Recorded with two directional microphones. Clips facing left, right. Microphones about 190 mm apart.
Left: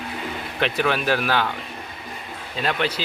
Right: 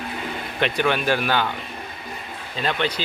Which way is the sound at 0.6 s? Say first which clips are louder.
Right 1 dB; centre (ahead or behind).